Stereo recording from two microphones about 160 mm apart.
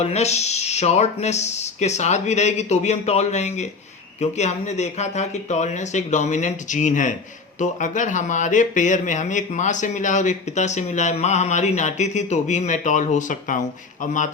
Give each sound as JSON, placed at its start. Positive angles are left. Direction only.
{"t": 0.0, "sound": "speech", "side_deg": 45}